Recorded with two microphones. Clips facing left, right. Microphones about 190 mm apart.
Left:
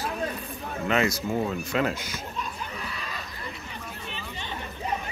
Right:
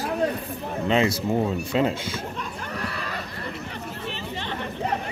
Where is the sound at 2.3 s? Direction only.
65° right (ahead or behind).